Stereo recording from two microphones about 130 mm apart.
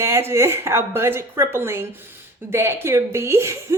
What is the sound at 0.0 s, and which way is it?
A woman's voice, 20° right (ahead or behind).